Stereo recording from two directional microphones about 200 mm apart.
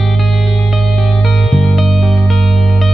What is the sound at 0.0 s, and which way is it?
Music, centre (ahead or behind).